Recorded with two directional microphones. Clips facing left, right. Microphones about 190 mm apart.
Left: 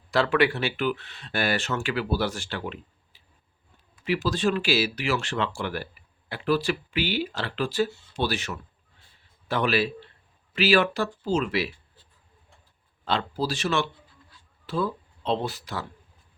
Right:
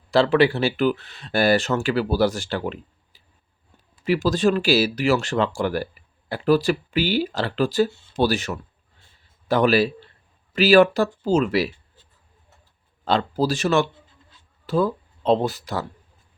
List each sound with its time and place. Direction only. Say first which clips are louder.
0.1 s speech: right 5 dB; 30° right (ahead or behind)
13.1 s speech: right 6 dB; 45° right (ahead or behind)